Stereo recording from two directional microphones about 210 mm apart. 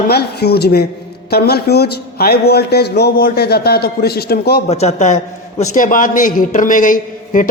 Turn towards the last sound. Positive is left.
turn(degrees=40)  # may be behind; listen again after turning